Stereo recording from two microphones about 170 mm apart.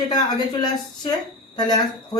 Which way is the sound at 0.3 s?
25° left (ahead or behind).